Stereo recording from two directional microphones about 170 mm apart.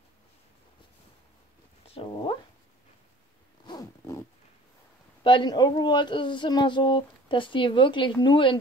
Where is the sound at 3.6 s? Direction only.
25° left (ahead or behind).